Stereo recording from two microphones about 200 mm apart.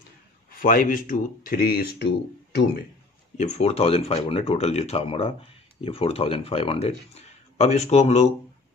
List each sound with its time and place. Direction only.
0.6 s speech: 45° left (ahead or behind)
3.3 s speech: 35° left (ahead or behind)